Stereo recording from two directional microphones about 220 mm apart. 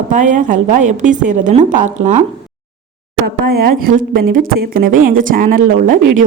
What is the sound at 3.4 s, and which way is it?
A woman's voice, 40° right (ahead or behind).